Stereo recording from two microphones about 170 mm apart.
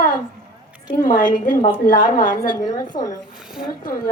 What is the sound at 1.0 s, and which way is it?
A woman's voice, 55° left (ahead or behind).